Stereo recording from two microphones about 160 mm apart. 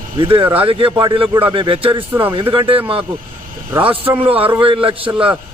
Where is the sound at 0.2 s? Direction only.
35° right (ahead or behind).